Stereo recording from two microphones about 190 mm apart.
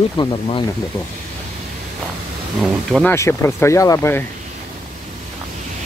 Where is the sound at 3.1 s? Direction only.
15° left (ahead or behind).